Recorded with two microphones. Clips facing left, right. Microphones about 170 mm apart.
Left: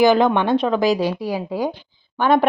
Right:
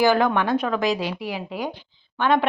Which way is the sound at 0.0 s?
20° left (ahead or behind).